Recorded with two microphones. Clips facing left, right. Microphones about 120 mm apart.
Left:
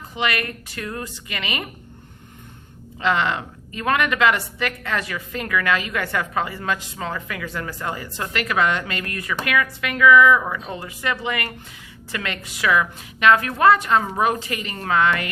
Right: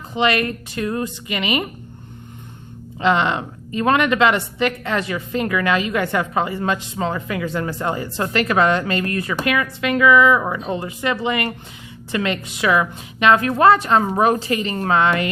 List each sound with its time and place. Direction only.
0.1 s a woman's voice: 25° right (ahead or behind)
3.0 s a woman's voice: 20° right (ahead or behind)